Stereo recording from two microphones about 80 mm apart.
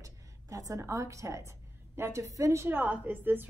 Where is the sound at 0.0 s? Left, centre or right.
Right.